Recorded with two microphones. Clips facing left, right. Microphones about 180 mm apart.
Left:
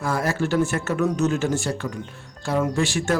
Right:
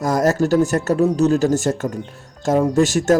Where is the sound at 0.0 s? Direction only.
40° right (ahead or behind).